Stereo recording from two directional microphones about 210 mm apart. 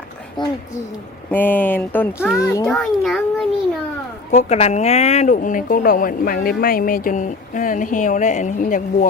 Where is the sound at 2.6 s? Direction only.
Centre (ahead or behind).